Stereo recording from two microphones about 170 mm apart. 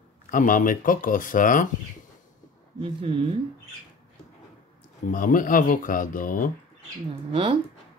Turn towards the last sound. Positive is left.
turn(degrees=-35)  # may be behind; listen again after turning